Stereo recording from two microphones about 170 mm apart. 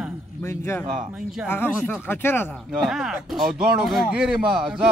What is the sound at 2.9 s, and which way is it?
A man's voice, 5° right (ahead or behind).